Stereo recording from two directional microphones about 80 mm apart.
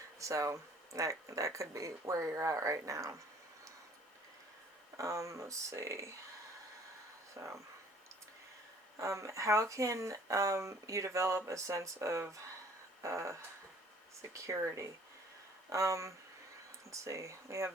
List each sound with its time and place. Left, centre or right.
0.2 s speech: right
4.9 s speech: right
7.3 s speech: right
9.0 s speech: right